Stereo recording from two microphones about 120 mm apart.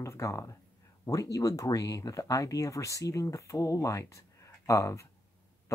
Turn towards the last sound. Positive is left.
turn(degrees=25)  # may be behind; listen again after turning